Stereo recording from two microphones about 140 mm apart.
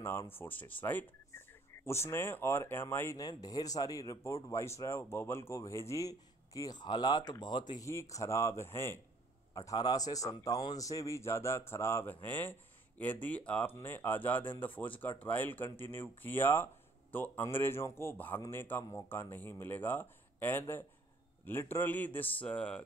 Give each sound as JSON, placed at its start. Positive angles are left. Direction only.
{"t": 0.0, "sound": "speech", "side_deg": 15}